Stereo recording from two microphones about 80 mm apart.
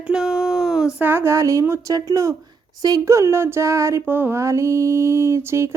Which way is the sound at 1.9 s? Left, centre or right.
Right.